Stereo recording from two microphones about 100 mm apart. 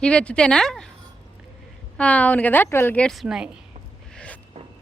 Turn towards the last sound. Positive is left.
turn(degrees=15)  # may be behind; listen again after turning